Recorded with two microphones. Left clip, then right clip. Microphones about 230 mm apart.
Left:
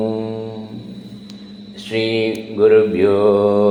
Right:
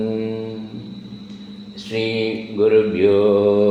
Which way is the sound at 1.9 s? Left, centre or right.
Centre.